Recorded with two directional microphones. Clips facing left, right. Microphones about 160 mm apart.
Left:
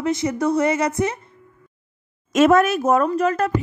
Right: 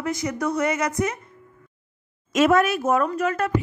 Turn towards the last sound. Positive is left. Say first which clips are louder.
# left 4 dB
turn(degrees=35)  # may be behind; listen again after turning